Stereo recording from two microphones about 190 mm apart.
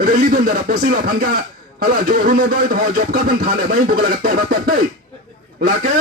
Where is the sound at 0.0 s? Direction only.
45° right (ahead or behind).